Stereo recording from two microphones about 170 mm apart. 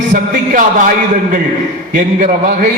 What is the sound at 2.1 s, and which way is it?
Speech, 50° right (ahead or behind).